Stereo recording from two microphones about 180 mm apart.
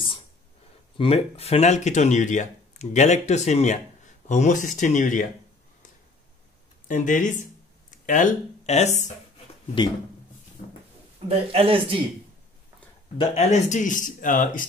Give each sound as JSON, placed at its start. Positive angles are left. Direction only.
{"t": 0.9, "sound": "speech", "side_deg": 30}
{"t": 6.9, "sound": "speech", "side_deg": 45}
{"t": 10.6, "sound": "a sound", "side_deg": 45}
{"t": 11.2, "sound": "a man's voice", "side_deg": -30}
{"t": 13.2, "sound": "speech", "side_deg": 35}